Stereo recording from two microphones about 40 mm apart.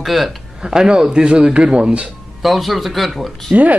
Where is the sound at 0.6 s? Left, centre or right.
Centre.